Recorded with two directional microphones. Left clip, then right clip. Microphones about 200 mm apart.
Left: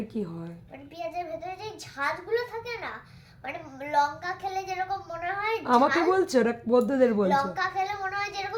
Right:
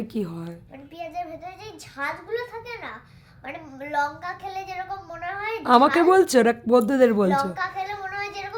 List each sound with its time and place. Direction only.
0.1 s a woman's voice: 45° right (ahead or behind)
1.6 s a child's voice: 5° left (ahead or behind)
5.6 s speech: 35° right (ahead or behind)
7.3 s a child's voice: 5° left (ahead or behind)